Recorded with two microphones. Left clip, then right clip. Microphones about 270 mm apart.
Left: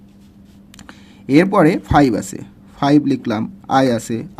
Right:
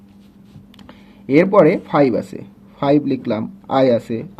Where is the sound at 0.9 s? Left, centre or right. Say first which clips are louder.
Even; left.